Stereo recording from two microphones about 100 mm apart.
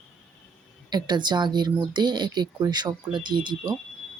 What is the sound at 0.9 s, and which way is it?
Speech, 45° right (ahead or behind).